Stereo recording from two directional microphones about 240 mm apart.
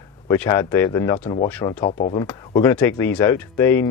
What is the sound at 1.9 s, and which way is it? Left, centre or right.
Speech, left.